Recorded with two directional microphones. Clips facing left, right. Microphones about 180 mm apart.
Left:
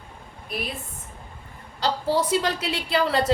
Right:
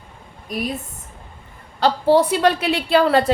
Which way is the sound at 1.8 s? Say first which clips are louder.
Right 8 dB; 60° right (ahead or behind).